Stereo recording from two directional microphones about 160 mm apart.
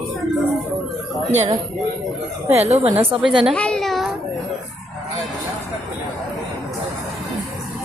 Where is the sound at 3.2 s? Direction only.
Centre (ahead or behind).